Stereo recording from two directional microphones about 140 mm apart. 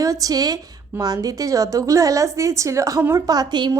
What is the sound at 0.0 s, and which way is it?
A woman's voice, 25° right (ahead or behind).